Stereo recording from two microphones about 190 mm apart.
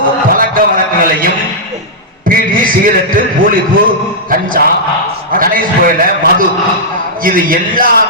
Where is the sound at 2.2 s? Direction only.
45° right (ahead or behind).